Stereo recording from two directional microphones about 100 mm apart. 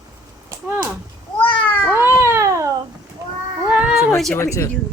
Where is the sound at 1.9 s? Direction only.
25° right (ahead or behind).